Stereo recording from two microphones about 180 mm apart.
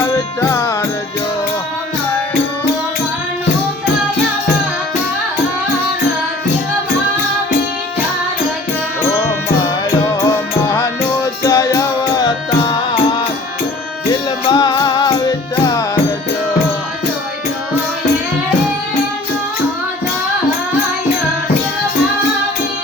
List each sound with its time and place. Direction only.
0.0 s music: 15° left (ahead or behind)
9.6 s music: 20° left (ahead or behind)